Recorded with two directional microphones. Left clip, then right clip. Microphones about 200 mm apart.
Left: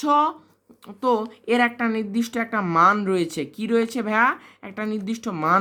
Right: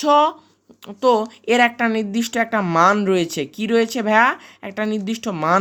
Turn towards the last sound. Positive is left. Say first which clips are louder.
# right 2 dB
turn(degrees=-20)  # may be behind; listen again after turning